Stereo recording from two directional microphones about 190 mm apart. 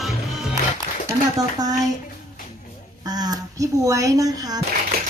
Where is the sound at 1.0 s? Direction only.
20° right (ahead or behind).